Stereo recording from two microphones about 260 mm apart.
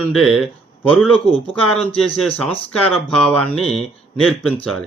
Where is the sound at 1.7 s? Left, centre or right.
Left.